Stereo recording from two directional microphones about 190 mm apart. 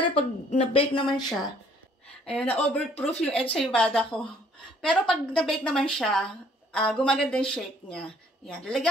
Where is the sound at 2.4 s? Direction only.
35° left (ahead or behind).